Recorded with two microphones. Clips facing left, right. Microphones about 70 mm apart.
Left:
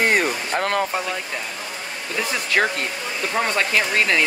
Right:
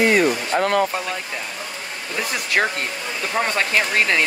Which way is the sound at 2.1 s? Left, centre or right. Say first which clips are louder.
Even; centre.